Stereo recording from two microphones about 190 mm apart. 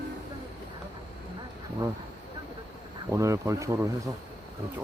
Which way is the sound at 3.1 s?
15° right (ahead or behind).